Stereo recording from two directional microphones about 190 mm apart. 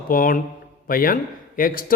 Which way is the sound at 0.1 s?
45° left (ahead or behind).